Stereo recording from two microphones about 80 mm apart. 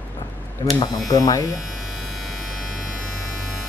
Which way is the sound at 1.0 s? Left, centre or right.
Left.